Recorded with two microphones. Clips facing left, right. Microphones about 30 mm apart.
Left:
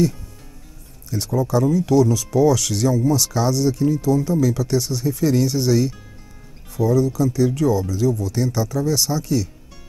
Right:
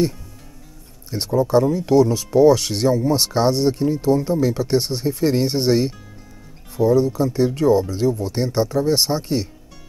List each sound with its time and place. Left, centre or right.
1.3 s speech: right